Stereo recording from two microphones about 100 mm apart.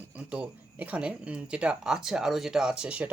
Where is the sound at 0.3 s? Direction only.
15° right (ahead or behind).